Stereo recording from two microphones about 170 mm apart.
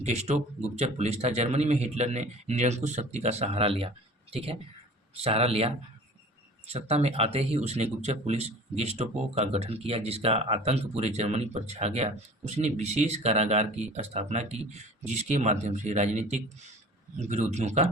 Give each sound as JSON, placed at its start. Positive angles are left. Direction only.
{"t": 0.0, "sound": "speech", "side_deg": -40}